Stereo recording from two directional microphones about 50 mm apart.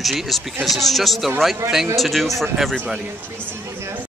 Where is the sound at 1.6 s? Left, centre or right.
Right.